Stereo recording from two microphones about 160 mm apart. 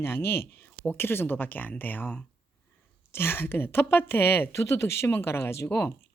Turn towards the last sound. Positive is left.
turn(degrees=15)  # may be behind; listen again after turning